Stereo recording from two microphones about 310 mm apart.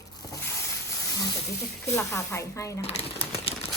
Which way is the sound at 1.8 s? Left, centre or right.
Centre.